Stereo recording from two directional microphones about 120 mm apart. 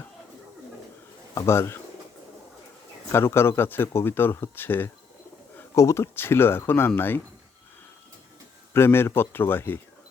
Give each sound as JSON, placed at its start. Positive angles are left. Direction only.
{"t": 1.4, "sound": "speech", "side_deg": 20}
{"t": 3.1, "sound": "speech", "side_deg": 20}
{"t": 8.7, "sound": "speech", "side_deg": 20}